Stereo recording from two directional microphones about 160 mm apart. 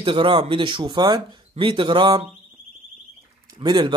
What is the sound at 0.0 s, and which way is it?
Speech, 30° right (ahead or behind).